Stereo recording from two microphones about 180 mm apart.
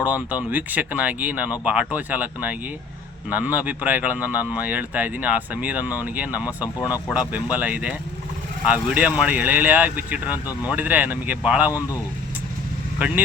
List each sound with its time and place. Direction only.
0.0 s speech: 10° right (ahead or behind)